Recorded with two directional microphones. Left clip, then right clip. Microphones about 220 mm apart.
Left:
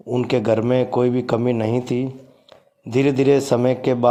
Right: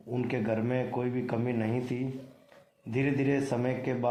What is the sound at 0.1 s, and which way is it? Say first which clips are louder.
A man's voice: left 13 dB; 40° left (ahead or behind).